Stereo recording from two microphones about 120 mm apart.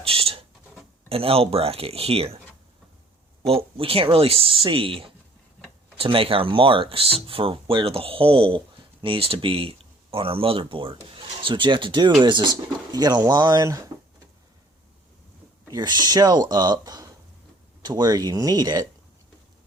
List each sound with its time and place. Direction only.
0.0 s a sound: 50° right (ahead or behind)
1.1 s speech: 55° right (ahead or behind)
3.8 s speech: 50° right (ahead or behind); by 13.9 s 25° right (ahead or behind)
15.6 s speech: 35° right (ahead or behind)